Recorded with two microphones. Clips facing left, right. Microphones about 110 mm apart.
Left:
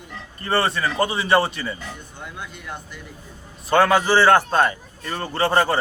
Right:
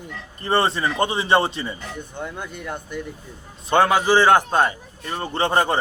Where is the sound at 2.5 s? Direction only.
50° right (ahead or behind).